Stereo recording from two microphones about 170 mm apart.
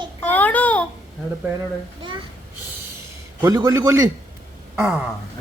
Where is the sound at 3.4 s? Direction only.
20° right (ahead or behind).